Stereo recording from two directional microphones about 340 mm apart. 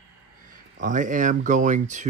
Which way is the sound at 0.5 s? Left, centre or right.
Right.